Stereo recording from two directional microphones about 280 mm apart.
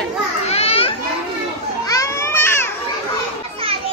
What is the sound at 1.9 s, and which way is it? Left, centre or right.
Children playing, centre.